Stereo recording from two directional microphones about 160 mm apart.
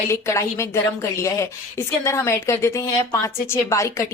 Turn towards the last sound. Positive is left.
turn(degrees=20)  # may be behind; listen again after turning